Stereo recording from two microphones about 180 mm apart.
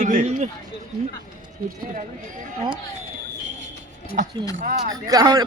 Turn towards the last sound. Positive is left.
turn(degrees=-20)  # may be behind; listen again after turning